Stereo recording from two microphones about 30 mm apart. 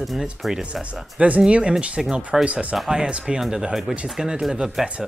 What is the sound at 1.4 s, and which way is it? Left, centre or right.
Speech, right.